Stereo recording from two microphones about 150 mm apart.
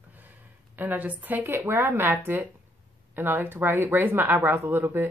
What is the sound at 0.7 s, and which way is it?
Speech, 10° right (ahead or behind).